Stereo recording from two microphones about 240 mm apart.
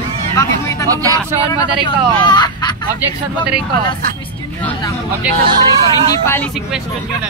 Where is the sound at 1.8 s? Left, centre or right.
Centre.